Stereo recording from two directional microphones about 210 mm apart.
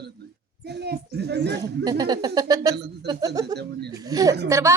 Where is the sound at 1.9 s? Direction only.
20° right (ahead or behind).